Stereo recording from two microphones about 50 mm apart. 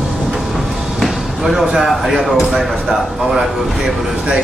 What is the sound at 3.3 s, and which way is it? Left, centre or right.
Speech, centre.